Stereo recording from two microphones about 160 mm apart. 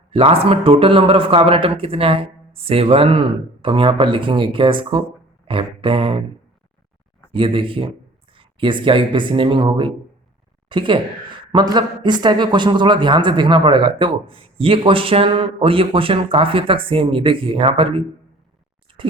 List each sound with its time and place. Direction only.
0.1 s speech: 35° right (ahead or behind)
5.5 s a sound: 35° right (ahead or behind)
7.3 s speech: 35° right (ahead or behind)